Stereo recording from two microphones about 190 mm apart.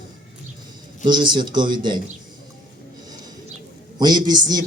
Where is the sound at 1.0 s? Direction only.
25° right (ahead or behind).